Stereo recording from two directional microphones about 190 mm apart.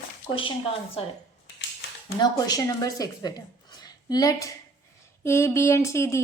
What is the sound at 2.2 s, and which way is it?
A woman's voice, 20° left (ahead or behind).